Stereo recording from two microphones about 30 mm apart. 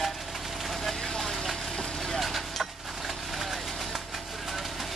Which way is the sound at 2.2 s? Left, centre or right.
Centre.